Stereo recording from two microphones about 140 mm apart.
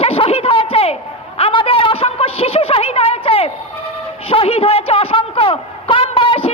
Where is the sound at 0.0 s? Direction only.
45° left (ahead or behind).